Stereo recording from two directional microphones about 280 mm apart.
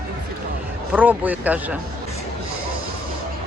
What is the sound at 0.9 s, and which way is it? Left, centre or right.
Speech, centre.